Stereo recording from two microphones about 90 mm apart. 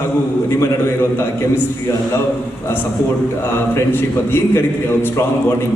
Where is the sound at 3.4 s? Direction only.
25° left (ahead or behind).